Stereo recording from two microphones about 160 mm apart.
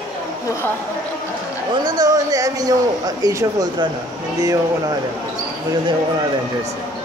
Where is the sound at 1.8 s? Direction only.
25° right (ahead or behind).